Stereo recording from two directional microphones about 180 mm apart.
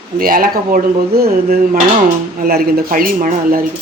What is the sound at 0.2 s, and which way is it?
Speech, 50° right (ahead or behind).